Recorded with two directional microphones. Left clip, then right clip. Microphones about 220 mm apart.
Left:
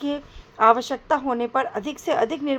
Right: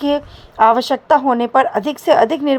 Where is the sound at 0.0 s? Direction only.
20° right (ahead or behind).